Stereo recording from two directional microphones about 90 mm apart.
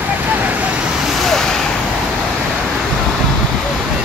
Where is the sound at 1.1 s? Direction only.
5° left (ahead or behind).